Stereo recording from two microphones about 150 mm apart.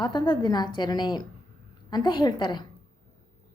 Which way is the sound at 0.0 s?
30° left (ahead or behind).